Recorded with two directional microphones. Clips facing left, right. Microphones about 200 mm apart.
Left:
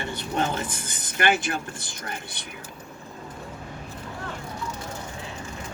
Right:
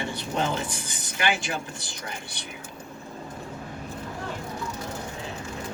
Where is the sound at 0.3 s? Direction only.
55° left (ahead or behind).